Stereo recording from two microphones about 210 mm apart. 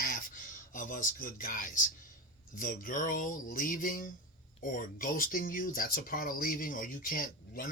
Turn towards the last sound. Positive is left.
turn(degrees=45)  # may be behind; listen again after turning